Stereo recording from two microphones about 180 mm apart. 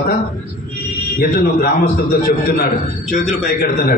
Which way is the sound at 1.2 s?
55° left (ahead or behind).